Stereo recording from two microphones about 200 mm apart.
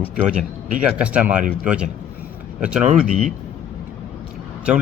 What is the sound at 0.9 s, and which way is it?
Speech, 5° right (ahead or behind).